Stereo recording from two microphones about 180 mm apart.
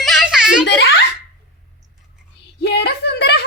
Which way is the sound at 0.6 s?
70° left (ahead or behind).